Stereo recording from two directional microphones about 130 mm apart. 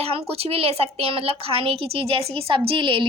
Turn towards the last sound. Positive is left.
turn(degrees=-40)  # may be behind; listen again after turning